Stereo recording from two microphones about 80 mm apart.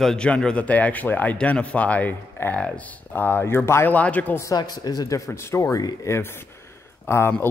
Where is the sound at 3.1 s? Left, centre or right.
Left.